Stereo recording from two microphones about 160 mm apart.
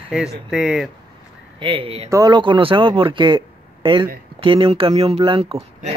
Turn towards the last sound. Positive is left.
turn(degrees=-40)  # may be behind; listen again after turning